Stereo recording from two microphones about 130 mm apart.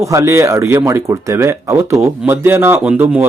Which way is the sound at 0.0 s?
25° right (ahead or behind).